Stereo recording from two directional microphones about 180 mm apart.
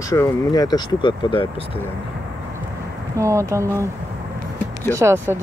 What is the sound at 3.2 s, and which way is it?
Speech, 15° right (ahead or behind).